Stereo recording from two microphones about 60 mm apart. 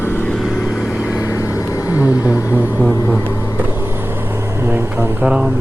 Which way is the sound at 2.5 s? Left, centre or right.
Left.